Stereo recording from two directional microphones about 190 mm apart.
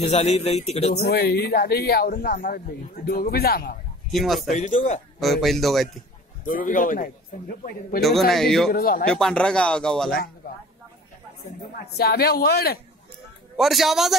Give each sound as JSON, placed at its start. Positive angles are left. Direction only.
{"t": 0.0, "sound": "a man's voice", "side_deg": 35}
{"t": 1.0, "sound": "a man's voice", "side_deg": 55}
{"t": 4.1, "sound": "speech", "side_deg": 0}
{"t": 4.5, "sound": "a man's voice", "side_deg": 40}
{"t": 5.2, "sound": "speech", "side_deg": 0}
{"t": 6.4, "sound": "a man's voice", "side_deg": 45}
{"t": 8.0, "sound": "speech", "side_deg": 0}
{"t": 8.7, "sound": "a man's voice", "side_deg": 50}
{"t": 9.1, "sound": "speech", "side_deg": 5}
{"t": 11.7, "sound": "speech", "side_deg": 55}
{"t": 13.6, "sound": "speech", "side_deg": 0}